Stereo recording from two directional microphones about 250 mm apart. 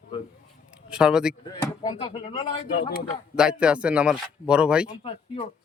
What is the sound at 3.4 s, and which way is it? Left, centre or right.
Speech, centre.